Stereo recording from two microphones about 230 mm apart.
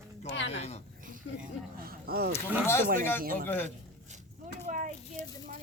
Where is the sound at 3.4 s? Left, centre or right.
Centre.